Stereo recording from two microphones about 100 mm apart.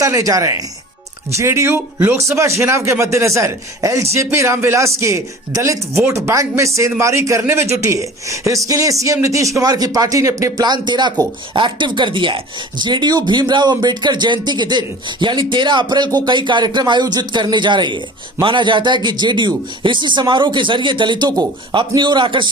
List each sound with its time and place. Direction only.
0.0 s a man's voice: 35° right (ahead or behind)
10.7 s a man's voice: 45° right (ahead or behind)